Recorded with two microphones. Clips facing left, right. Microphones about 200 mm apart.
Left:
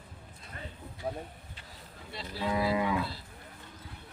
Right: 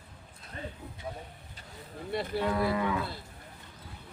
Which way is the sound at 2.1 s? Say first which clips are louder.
Right 10 dB; 55° right (ahead or behind).